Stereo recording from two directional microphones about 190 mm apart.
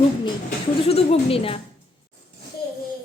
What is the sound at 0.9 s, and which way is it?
Speech, 30° left (ahead or behind).